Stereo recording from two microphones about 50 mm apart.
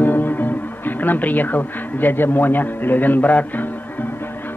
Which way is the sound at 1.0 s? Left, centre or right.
Left.